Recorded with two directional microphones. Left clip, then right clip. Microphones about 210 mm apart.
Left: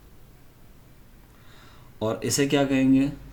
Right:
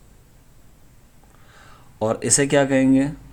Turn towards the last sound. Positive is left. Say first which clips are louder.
# right 4 dB
turn(degrees=-45)  # may be behind; listen again after turning